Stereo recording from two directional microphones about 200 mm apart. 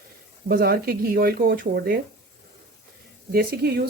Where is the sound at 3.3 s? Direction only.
50° right (ahead or behind).